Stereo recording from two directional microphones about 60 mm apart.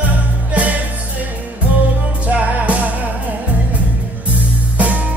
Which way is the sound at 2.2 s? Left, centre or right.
Right.